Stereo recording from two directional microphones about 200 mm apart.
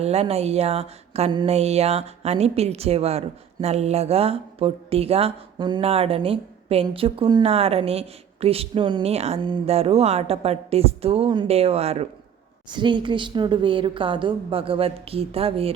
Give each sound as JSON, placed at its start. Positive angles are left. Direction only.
{"t": 0.0, "sound": "a woman's voice", "side_deg": -30}